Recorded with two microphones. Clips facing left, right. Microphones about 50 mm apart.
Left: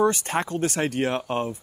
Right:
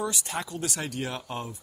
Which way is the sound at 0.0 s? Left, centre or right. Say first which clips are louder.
Left 9 dB; left.